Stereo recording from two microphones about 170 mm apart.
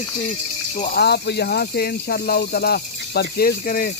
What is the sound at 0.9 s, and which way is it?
Speech, 75° left (ahead or behind).